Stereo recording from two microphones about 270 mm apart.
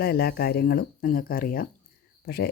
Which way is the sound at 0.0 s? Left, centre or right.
Left.